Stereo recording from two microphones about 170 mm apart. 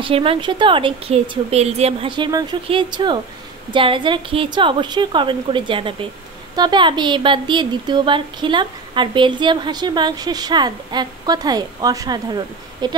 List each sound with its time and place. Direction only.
0.0 s a woman's voice: 35° right (ahead or behind)